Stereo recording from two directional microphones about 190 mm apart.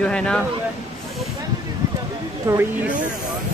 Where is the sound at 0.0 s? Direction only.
5° left (ahead or behind).